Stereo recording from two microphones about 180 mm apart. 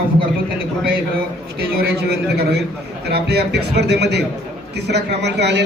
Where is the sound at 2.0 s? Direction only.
65° right (ahead or behind).